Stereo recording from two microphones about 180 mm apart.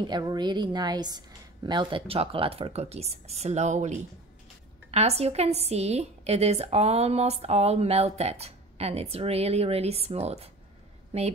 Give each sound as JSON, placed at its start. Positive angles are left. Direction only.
{"t": 0.0, "sound": "a woman's voice", "side_deg": -25}